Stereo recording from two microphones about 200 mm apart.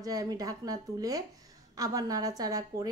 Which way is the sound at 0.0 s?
20° right (ahead or behind).